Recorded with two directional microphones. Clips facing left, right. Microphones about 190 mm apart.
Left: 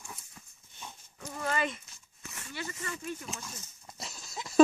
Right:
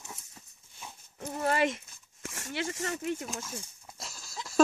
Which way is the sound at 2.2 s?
85° right.